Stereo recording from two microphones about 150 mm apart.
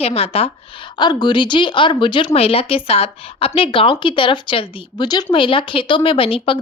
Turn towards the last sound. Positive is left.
turn(degrees=35)  # may be behind; listen again after turning